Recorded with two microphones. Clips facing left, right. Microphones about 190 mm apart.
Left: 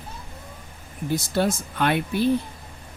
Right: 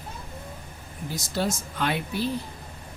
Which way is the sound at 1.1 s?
55° left (ahead or behind).